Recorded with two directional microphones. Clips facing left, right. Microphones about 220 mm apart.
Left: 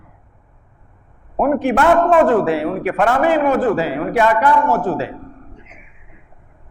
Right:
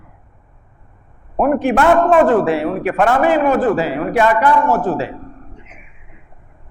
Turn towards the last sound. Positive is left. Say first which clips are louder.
# right 1 dB
turn(degrees=-15)  # may be behind; listen again after turning